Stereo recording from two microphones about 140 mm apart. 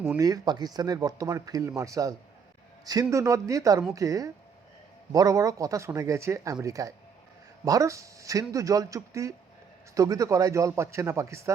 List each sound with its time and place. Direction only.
0.2 s speech: 25° right (ahead or behind)